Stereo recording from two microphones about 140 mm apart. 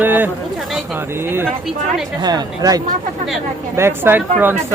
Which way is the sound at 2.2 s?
30° right (ahead or behind).